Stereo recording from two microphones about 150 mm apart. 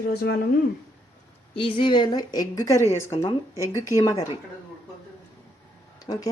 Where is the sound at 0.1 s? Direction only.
90° left.